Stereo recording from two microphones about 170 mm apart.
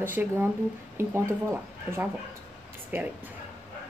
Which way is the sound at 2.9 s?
15° right (ahead or behind).